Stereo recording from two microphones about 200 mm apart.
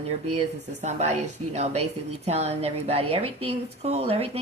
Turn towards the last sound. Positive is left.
turn(degrees=-30)  # may be behind; listen again after turning